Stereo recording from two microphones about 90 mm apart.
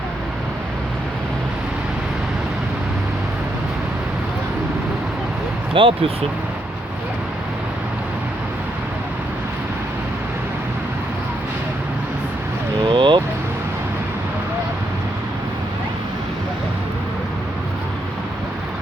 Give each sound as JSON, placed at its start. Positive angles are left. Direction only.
{"t": 5.7, "sound": "speech", "side_deg": -75}
{"t": 12.9, "sound": "vehicle", "side_deg": -65}